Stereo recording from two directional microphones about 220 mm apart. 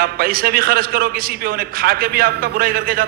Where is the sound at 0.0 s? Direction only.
40° right (ahead or behind).